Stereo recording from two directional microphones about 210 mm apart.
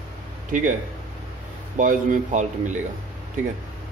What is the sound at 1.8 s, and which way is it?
Speech, 40° right (ahead or behind).